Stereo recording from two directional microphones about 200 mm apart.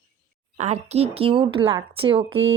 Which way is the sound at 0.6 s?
35° right (ahead or behind).